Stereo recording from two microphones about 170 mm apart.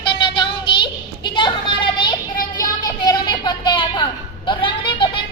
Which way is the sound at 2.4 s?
55° left (ahead or behind).